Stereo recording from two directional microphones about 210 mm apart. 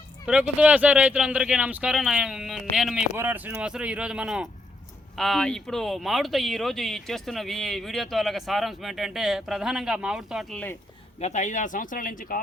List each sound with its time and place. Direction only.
0.3 s speech: 5° right (ahead or behind)
11.2 s speech: 35° left (ahead or behind)